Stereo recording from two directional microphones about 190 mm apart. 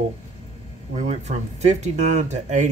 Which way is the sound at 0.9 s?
35° right (ahead or behind).